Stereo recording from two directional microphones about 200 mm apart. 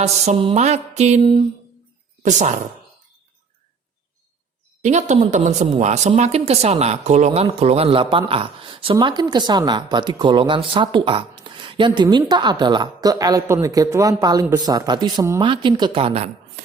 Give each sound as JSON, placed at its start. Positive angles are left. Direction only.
{"t": 0.0, "sound": "mantra", "side_deg": -30}
{"t": 2.2, "sound": "mantra", "side_deg": -35}
{"t": 4.8, "sound": "mantra", "side_deg": -35}
{"t": 5.8, "sound": "speech", "side_deg": -35}